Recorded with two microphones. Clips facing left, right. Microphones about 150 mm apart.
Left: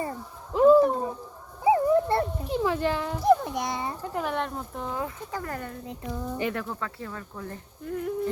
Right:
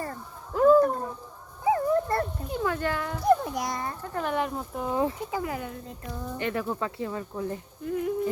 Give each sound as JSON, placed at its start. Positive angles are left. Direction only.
{"t": 0.5, "sound": "a sound", "side_deg": 15}
{"t": 2.8, "sound": "speech", "side_deg": 25}
{"t": 3.2, "sound": "speech", "side_deg": 0}
{"t": 4.9, "sound": "speech", "side_deg": -25}
{"t": 5.3, "sound": "speech", "side_deg": -10}
{"t": 5.8, "sound": "a sound", "side_deg": 15}
{"t": 6.7, "sound": "speech", "side_deg": -20}
{"t": 7.9, "sound": "speech", "side_deg": -5}